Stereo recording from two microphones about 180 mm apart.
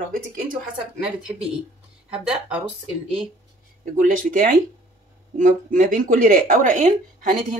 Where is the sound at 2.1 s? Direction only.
5° right (ahead or behind).